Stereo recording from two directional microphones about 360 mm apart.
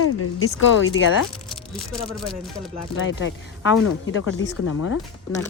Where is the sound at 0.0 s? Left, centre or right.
Left.